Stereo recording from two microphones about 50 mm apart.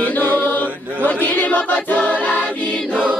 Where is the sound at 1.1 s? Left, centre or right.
Left.